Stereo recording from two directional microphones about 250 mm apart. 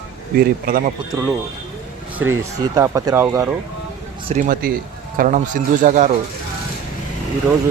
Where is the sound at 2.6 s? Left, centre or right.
Centre.